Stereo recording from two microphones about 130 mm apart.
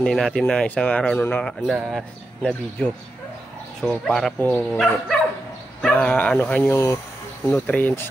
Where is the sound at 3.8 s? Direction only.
10° left (ahead or behind).